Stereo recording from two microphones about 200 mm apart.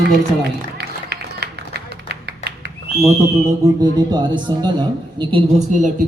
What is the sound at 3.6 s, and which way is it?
A woman's voice, 20° right (ahead or behind).